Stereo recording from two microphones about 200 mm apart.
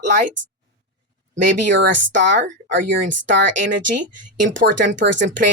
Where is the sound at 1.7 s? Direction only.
65° right (ahead or behind).